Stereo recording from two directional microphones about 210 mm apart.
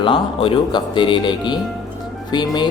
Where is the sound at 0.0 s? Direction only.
25° left (ahead or behind).